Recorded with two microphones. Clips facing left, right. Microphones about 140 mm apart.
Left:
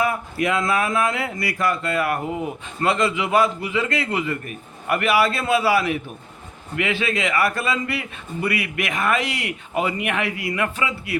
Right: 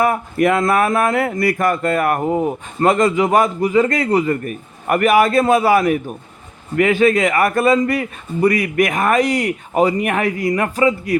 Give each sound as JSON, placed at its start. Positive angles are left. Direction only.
{"t": 0.0, "sound": "speech", "side_deg": -50}